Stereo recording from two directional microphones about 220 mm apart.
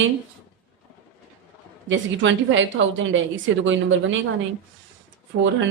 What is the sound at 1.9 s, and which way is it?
A woman's voice, 60° right (ahead or behind).